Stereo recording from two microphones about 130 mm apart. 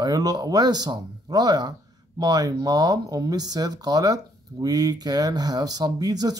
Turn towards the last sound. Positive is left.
turn(degrees=-30)  # may be behind; listen again after turning